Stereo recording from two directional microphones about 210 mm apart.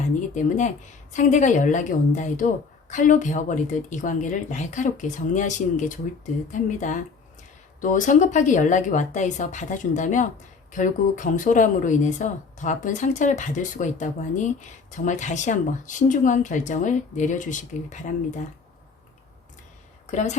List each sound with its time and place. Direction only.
0.0 s speech: 35° left (ahead or behind)
20.1 s speech: 35° left (ahead or behind)